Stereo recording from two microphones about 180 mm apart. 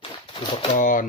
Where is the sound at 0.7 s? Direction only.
50° left (ahead or behind).